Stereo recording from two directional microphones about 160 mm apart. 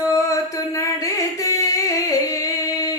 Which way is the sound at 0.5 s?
20° left (ahead or behind).